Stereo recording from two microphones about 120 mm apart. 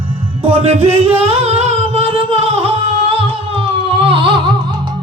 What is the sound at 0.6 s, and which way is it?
Speech, 55° right (ahead or behind).